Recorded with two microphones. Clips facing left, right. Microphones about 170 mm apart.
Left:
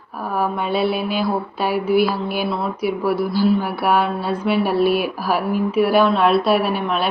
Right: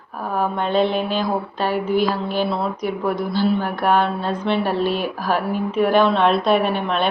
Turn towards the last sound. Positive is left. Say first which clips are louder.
# even
turn(degrees=5)  # may be behind; listen again after turning